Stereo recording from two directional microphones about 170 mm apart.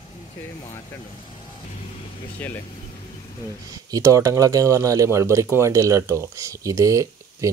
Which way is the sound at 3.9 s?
20° right (ahead or behind).